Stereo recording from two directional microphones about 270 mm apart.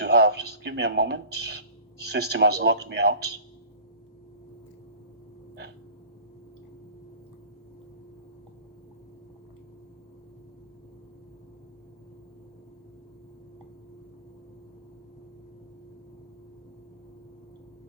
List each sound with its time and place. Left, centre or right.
0.0 s speech: right